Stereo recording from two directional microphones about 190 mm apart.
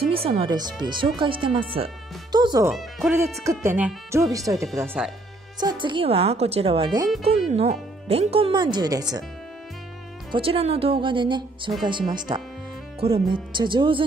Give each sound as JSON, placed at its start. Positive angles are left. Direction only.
{"t": 0.0, "sound": "speech", "side_deg": -30}
{"t": 3.4, "sound": "speech", "side_deg": -10}
{"t": 5.6, "sound": "speech", "side_deg": -25}
{"t": 10.3, "sound": "speech", "side_deg": -30}